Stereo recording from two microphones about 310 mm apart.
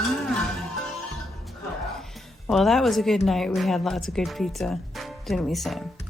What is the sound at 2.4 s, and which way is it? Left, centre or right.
A woman's voice, centre.